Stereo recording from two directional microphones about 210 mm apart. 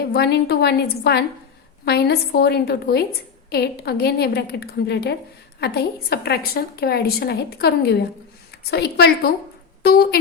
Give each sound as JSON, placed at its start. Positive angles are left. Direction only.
{"t": 0.1, "sound": "a woman's voice", "side_deg": 50}